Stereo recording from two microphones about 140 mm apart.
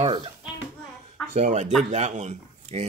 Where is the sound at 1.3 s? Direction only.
55° right (ahead or behind).